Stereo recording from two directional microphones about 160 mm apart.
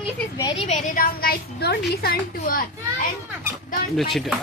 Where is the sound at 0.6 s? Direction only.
45° left (ahead or behind); by 2.6 s 85° left.